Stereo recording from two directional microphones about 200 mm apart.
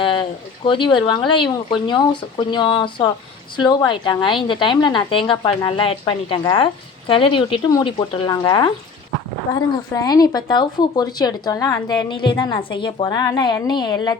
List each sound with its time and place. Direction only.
0.0 s a woman's voice: 25° left (ahead or behind)
9.9 s a woman's voice: 20° left (ahead or behind)